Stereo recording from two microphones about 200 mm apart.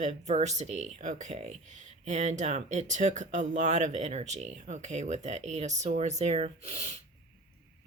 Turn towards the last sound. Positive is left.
turn(degrees=-30)  # may be behind; listen again after turning